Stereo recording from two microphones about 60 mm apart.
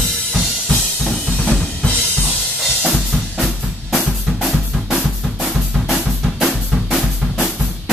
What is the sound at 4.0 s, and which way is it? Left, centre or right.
Drum kit, centre.